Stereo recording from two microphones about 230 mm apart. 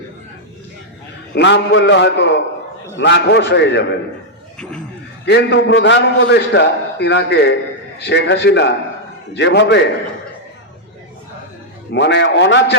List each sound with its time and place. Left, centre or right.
1.3 s a man's voice: left
4.5 s a sound: centre
5.2 s a man's voice: left
11.9 s a man's voice: left